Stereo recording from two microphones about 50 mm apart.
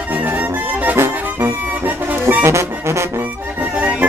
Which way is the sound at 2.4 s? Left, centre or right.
Right.